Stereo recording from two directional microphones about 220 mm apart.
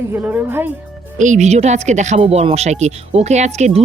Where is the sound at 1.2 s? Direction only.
35° right (ahead or behind).